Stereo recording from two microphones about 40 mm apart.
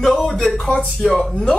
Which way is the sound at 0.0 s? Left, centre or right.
Centre.